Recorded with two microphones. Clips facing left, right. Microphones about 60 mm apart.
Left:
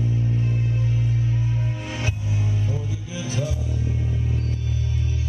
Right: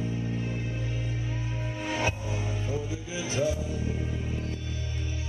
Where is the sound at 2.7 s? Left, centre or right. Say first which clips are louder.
Left 2 dB; centre.